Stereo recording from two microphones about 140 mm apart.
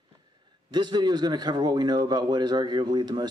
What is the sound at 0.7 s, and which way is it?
A man's voice, 30° right (ahead or behind).